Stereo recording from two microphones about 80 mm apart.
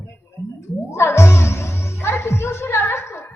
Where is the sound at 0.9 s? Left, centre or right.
Left.